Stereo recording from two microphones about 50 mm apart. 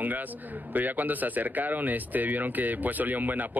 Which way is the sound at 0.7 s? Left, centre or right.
Right.